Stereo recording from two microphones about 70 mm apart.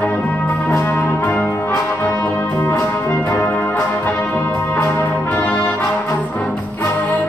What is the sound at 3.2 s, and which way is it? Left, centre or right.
Music, left.